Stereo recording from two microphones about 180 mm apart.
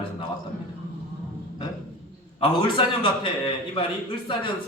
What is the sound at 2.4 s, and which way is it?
A man's voice, 30° left (ahead or behind).